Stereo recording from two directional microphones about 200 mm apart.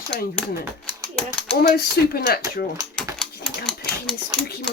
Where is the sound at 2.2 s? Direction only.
55° left (ahead or behind).